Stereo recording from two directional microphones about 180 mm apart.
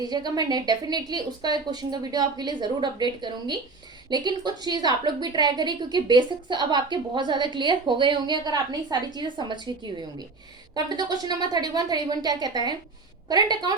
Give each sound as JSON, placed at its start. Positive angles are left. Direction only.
{"t": 0.0, "sound": "a woman's voice", "side_deg": -20}
{"t": 10.8, "sound": "a woman's voice", "side_deg": -20}